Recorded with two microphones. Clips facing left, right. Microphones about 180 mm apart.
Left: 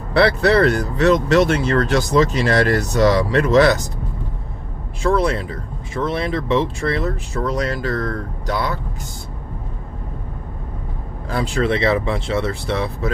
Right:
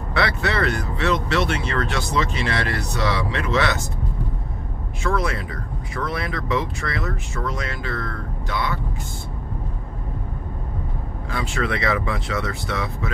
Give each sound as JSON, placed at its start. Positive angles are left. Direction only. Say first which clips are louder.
{"t": 0.1, "sound": "speech", "louder": "left 9 dB", "side_deg": 35}
{"t": 5.0, "sound": "speech", "louder": "left 6 dB", "side_deg": 30}
{"t": 11.2, "sound": "speech", "louder": "left 6 dB", "side_deg": 35}